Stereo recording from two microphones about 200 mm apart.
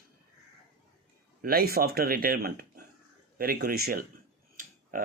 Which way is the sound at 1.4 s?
45° right (ahead or behind).